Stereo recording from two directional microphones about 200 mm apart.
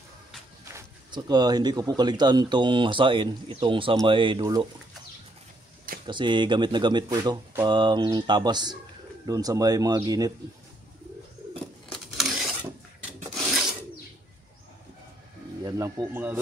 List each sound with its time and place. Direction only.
0.7 s speech: 15° right (ahead or behind)
6.0 s speech: 25° right (ahead or behind)
11.9 s a sound: centre (ahead or behind)
13.3 s filing: centre (ahead or behind)
15.6 s speech: 15° right (ahead or behind)